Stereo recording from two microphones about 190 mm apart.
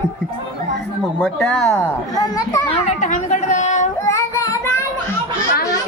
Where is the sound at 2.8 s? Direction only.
40° left (ahead or behind).